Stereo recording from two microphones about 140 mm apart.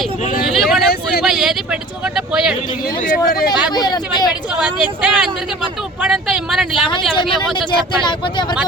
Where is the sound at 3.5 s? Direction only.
30° left (ahead or behind).